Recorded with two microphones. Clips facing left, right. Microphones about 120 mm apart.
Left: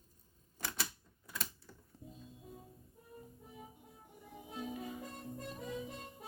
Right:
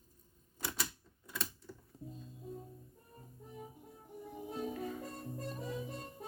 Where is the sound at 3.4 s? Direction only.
5° left (ahead or behind).